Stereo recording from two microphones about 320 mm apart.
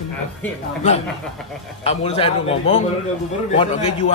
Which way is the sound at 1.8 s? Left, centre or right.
Centre.